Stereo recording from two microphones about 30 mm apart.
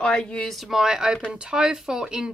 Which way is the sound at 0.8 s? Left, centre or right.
Right.